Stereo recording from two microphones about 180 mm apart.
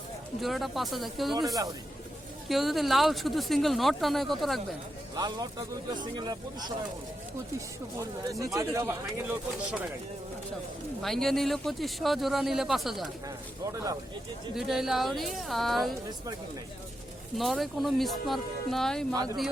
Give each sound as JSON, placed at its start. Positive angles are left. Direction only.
{"t": 0.4, "sound": "a man's voice", "side_deg": 0}
{"t": 2.5, "sound": "a man's voice", "side_deg": 0}
{"t": 5.1, "sound": "speech", "side_deg": -20}
{"t": 7.9, "sound": "speech", "side_deg": -20}
{"t": 11.0, "sound": "a man's voice", "side_deg": 0}
{"t": 13.2, "sound": "speech", "side_deg": -20}
{"t": 14.5, "sound": "a man's voice", "side_deg": 0}
{"t": 17.3, "sound": "a man's voice", "side_deg": 0}
{"t": 19.1, "sound": "speech", "side_deg": -20}